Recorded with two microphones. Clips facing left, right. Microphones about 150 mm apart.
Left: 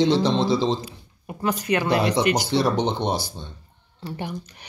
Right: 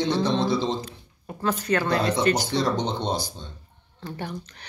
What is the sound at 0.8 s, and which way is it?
Speech, 15° left (ahead or behind).